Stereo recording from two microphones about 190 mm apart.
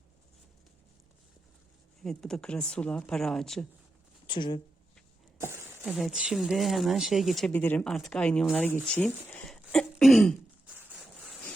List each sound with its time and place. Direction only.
2.0 s speech: 5° left (ahead or behind)
4.3 s speech: 25° left (ahead or behind)
5.8 s speech: centre (ahead or behind)